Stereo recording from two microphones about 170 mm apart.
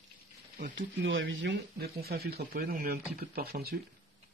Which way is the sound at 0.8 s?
90° right.